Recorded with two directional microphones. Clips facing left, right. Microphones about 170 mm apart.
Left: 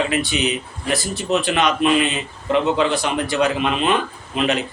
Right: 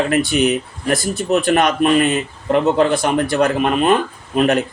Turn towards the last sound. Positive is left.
turn(degrees=-50)  # may be behind; listen again after turning